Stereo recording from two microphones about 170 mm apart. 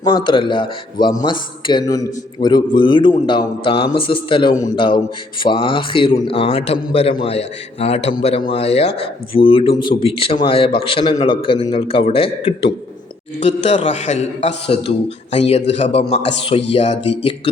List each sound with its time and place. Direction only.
0.0 s a man's voice: 25° left (ahead or behind)